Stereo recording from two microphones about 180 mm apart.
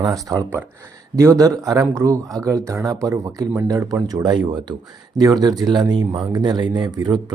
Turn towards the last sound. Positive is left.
turn(degrees=-25)  # may be behind; listen again after turning